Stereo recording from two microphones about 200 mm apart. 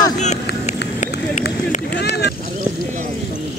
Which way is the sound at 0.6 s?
35° left (ahead or behind).